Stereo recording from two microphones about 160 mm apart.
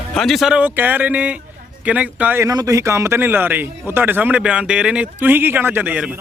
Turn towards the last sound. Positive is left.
turn(degrees=-10)  # may be behind; listen again after turning